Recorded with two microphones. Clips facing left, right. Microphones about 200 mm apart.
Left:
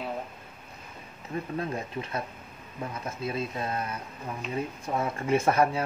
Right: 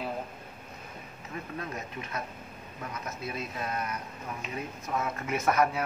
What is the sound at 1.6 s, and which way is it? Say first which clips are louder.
Speech: left 5 dB; 30° left (ahead or behind).